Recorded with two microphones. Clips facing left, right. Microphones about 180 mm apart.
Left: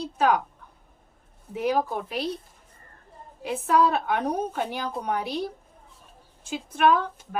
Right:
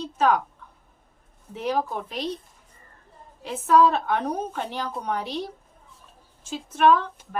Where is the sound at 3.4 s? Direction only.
10° left (ahead or behind).